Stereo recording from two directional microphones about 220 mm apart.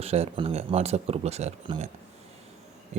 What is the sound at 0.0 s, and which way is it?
A man's voice, 30° right (ahead or behind).